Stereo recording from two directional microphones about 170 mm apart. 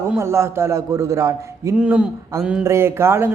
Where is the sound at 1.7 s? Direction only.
5° right (ahead or behind).